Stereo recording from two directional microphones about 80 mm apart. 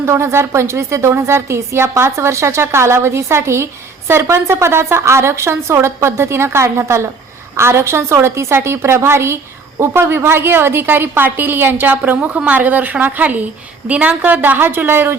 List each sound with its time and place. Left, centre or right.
0.0 s a woman's voice: right